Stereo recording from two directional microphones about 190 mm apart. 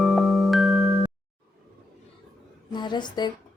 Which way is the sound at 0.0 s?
Centre (ahead or behind).